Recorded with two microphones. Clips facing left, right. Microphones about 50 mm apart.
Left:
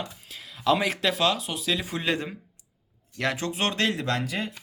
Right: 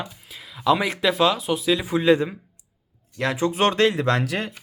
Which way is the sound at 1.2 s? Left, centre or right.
Centre.